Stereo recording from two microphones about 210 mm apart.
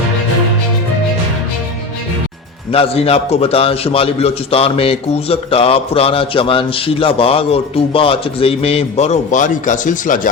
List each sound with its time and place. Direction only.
2.7 s a man's voice: 30° left (ahead or behind)